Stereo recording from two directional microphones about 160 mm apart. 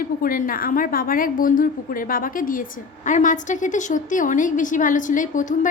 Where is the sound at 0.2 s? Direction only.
60° left (ahead or behind).